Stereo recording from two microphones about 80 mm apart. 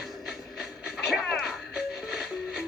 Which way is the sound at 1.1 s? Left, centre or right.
Centre.